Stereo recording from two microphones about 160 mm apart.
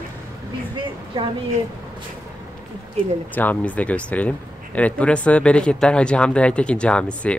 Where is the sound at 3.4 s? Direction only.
10° left (ahead or behind).